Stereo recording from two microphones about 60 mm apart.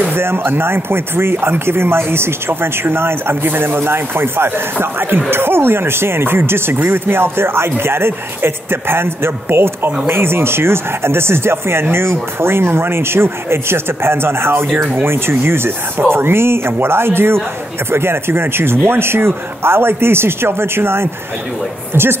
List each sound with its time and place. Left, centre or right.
0.1 s speech: right